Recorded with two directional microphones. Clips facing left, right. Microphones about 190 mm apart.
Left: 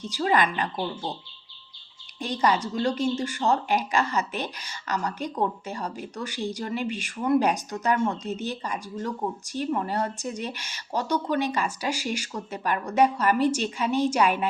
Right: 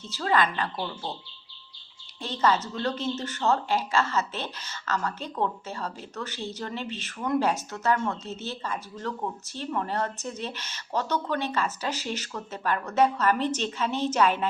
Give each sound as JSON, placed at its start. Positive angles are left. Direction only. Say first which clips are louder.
{"t": 0.0, "sound": "a woman's voice", "louder": "left 2 dB", "side_deg": 15}
{"t": 2.1, "sound": "a woman's voice", "louder": "left 1 dB", "side_deg": 15}